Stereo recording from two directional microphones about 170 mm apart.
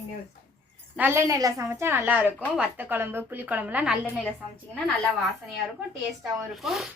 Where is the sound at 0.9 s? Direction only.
15° right (ahead or behind).